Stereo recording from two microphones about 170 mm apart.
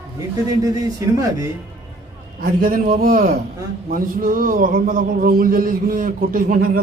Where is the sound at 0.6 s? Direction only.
20° right (ahead or behind).